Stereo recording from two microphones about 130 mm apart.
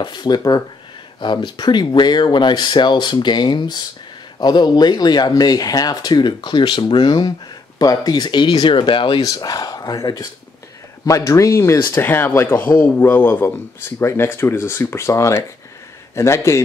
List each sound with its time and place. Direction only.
0.0 s speech: 35° left (ahead or behind)
9.2 s speech: 30° left (ahead or behind)